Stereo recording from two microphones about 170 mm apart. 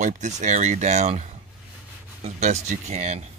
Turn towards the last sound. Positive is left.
turn(degrees=-40)  # may be behind; listen again after turning